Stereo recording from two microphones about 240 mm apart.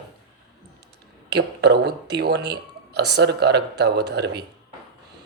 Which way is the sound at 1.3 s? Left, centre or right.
Right.